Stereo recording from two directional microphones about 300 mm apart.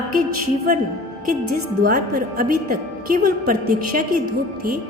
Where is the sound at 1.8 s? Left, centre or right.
Right.